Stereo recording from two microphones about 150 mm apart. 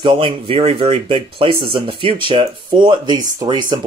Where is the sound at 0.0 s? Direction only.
35° right (ahead or behind).